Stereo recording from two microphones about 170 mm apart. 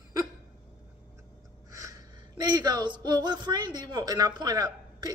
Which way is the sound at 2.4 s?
25° right (ahead or behind).